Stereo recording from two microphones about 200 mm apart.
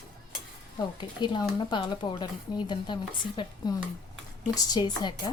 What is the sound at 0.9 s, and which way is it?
A woman's voice, 20° left (ahead or behind).